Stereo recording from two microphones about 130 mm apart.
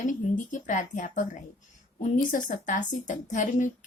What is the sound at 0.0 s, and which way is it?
A woman's voice, 75° left (ahead or behind).